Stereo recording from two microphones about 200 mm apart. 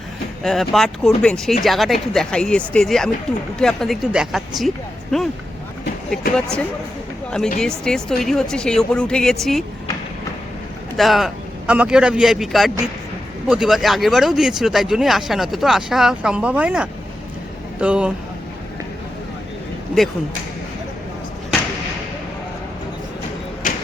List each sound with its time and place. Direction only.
0.4 s speech: centre (ahead or behind)
10.9 s speech: centre (ahead or behind)